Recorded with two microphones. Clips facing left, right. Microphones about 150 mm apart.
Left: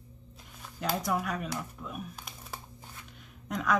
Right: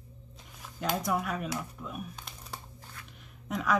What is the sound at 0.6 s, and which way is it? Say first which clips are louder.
Speech: even; centre (ahead or behind).